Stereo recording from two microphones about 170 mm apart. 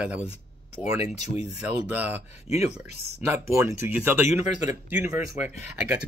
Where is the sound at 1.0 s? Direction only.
35° left (ahead or behind).